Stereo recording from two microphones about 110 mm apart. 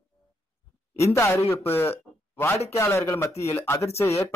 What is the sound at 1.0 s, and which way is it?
A man's voice, 25° left (ahead or behind).